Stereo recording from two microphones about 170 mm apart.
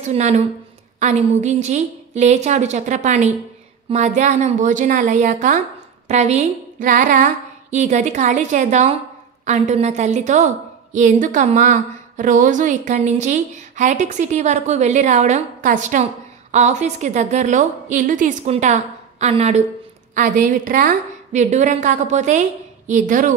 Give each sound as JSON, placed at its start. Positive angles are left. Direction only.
{"t": 0.0, "sound": "a woman's voice", "side_deg": -40}
{"t": 20.2, "sound": "a woman's voice", "side_deg": -55}